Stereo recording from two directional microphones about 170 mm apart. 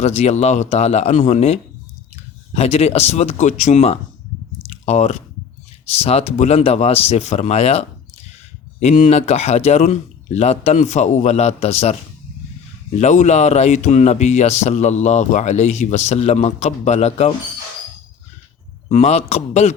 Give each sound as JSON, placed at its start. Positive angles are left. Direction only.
{"t": 0.0, "sound": "speech", "side_deg": 40}
{"t": 2.6, "sound": "speech", "side_deg": 40}
{"t": 4.6, "sound": "chewing", "side_deg": 40}
{"t": 5.8, "sound": "speech", "side_deg": 35}
{"t": 13.0, "sound": "speech", "side_deg": 45}
{"t": 18.9, "sound": "speech", "side_deg": 45}